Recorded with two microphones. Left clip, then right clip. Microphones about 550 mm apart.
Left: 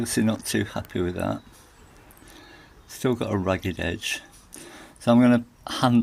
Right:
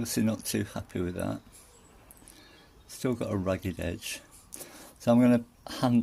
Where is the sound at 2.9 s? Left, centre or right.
Right.